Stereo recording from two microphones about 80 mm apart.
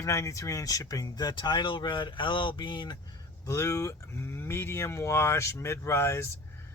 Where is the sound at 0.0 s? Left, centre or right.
Left.